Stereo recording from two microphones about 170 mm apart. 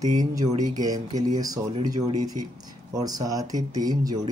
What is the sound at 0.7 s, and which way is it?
Speech, 20° right (ahead or behind).